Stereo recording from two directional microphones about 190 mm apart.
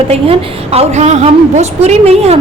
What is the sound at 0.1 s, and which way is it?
A woman's voice, 35° right (ahead or behind).